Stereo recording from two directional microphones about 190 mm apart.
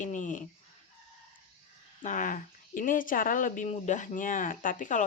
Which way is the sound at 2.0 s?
45° left (ahead or behind).